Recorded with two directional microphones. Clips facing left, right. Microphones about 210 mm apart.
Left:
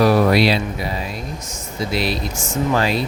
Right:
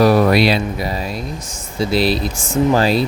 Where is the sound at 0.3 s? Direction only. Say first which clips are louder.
Right 2 dB; 55° right (ahead or behind).